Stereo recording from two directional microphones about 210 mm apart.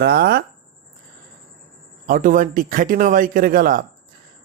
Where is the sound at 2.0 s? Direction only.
40° right (ahead or behind).